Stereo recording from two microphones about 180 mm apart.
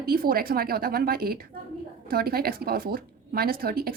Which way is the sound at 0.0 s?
55° right (ahead or behind).